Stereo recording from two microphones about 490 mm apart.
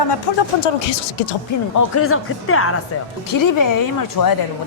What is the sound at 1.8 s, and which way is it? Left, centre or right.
Speech, left.